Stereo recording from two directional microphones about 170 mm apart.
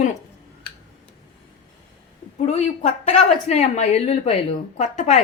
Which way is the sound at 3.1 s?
40° left (ahead or behind).